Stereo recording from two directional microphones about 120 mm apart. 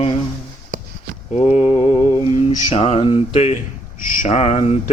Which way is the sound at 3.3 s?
65° left (ahead or behind).